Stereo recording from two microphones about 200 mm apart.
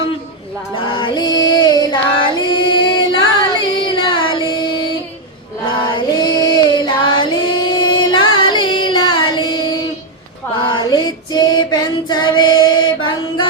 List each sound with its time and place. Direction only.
0.9 s female singing: 25° left (ahead or behind)
3.6 s music: 25° left (ahead or behind)
5.6 s female singing: 25° left (ahead or behind)
9.3 s child singing: 20° left (ahead or behind)
10.6 s female singing: 25° left (ahead or behind)